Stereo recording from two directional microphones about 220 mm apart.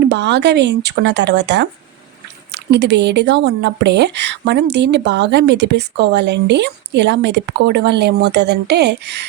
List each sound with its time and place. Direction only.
0.1 s speech: 50° right (ahead or behind)